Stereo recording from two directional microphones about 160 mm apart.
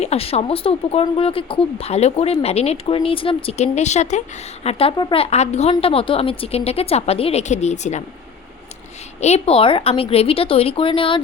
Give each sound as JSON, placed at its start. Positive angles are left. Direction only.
{"t": 0.0, "sound": "speech", "side_deg": 40}
{"t": 9.2, "sound": "speech", "side_deg": 40}